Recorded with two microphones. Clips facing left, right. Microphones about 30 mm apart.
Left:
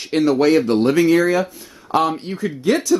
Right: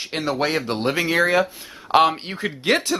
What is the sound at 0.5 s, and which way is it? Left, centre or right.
Speech, right.